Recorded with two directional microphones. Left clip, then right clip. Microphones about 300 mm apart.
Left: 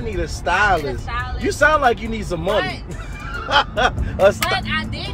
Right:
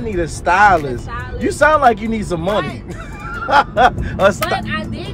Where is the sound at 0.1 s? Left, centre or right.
Right.